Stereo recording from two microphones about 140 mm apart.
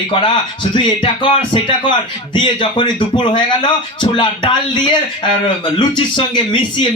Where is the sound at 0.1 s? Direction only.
35° left (ahead or behind).